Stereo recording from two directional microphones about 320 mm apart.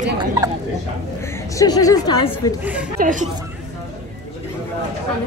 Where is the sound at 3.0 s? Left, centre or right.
Right.